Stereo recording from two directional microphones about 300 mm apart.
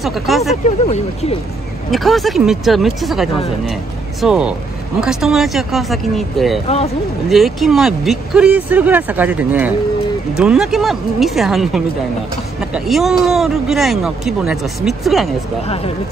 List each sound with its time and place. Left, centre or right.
0.0 s speech: centre
1.9 s speech: centre
15.6 s speech: centre